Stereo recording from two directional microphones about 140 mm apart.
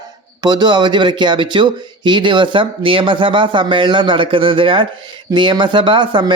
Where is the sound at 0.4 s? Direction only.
30° right (ahead or behind).